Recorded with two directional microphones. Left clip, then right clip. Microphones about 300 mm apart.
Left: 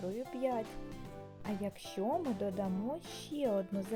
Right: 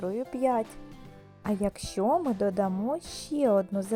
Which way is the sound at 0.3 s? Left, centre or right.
Centre.